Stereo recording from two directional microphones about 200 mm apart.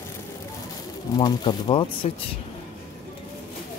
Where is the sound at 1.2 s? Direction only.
25° left (ahead or behind).